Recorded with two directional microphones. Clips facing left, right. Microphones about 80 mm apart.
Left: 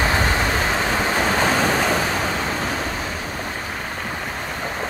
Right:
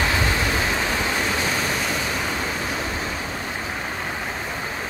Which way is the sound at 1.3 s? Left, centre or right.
Left.